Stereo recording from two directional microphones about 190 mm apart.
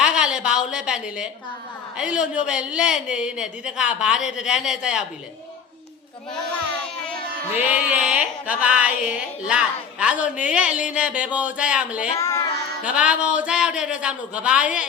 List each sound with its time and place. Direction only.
0.0 s a sound: 5° right (ahead or behind)
2.0 s a woman's voice: 5° right (ahead or behind)
7.5 s a woman's voice: 5° right (ahead or behind)
12.1 s child singing: 15° left (ahead or behind)
12.8 s a woman's voice: 5° right (ahead or behind)